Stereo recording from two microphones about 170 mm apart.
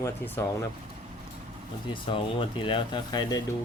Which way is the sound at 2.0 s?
30° left (ahead or behind).